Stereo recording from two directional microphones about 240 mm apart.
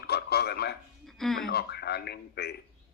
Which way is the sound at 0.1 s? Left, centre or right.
Left.